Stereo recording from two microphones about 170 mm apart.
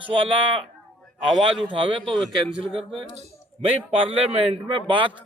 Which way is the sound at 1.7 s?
30° right (ahead or behind).